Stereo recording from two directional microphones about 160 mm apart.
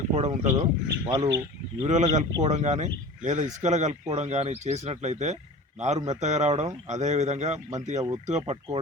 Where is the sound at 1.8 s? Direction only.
50° right (ahead or behind).